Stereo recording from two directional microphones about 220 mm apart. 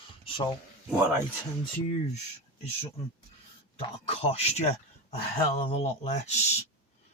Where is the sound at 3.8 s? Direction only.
25° left (ahead or behind).